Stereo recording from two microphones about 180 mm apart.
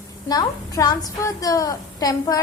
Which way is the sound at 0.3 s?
20° left (ahead or behind).